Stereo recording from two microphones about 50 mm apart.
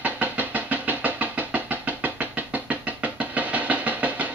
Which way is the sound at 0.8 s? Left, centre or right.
Right.